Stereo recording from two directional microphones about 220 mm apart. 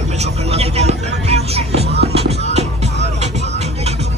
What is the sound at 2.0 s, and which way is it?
Music, 30° right (ahead or behind).